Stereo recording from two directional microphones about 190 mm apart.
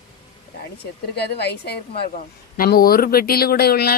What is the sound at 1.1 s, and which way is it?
Speech, 60° left (ahead or behind).